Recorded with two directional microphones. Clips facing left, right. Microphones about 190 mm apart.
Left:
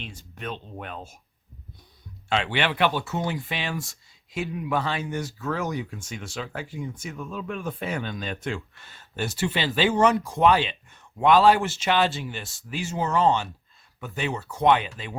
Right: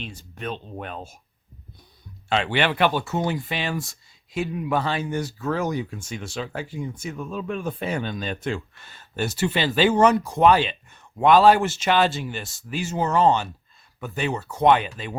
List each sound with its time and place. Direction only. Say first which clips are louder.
0.0 s speech: right 3 dB; 35° right (ahead or behind)
2.3 s speech: right 3 dB; 40° right (ahead or behind)